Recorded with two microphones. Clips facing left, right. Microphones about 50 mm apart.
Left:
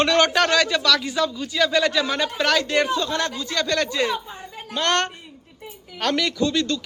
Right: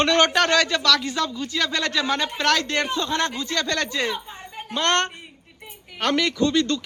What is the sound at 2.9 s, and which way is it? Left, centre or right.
Speech, right.